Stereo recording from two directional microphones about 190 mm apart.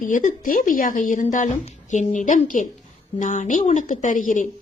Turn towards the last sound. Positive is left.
turn(degrees=45)  # may be behind; listen again after turning